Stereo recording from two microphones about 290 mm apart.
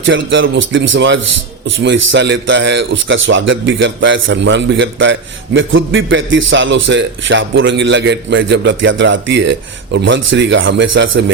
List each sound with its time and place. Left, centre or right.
0.0 s a man's voice: right